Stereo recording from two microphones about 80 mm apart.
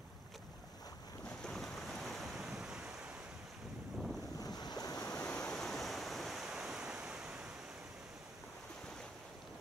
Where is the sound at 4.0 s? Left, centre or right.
Centre.